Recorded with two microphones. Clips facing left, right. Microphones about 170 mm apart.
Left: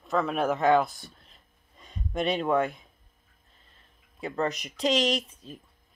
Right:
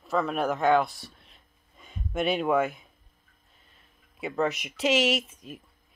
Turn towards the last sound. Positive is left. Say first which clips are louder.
# right 1 dB
turn(degrees=-10)  # may be behind; listen again after turning